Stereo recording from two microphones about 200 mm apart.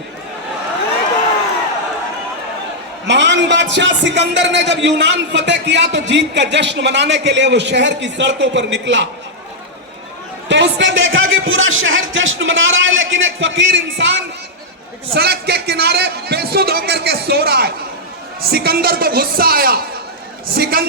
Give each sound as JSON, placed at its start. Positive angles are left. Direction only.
{"t": 3.1, "sound": "a man's voice", "side_deg": -60}
{"t": 10.5, "sound": "a man's voice", "side_deg": -65}
{"t": 15.1, "sound": "a man's voice", "side_deg": -55}